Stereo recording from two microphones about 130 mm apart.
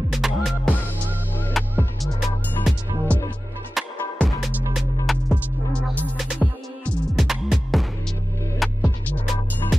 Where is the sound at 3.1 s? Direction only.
10° left (ahead or behind).